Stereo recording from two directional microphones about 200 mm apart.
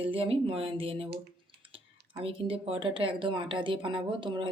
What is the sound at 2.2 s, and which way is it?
Speech, 30° right (ahead or behind).